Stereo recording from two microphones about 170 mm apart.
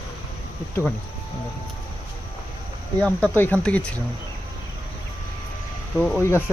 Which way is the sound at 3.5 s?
15° right (ahead or behind).